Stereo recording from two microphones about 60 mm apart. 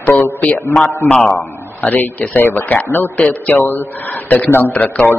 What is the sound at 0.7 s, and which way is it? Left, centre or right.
Speech, centre.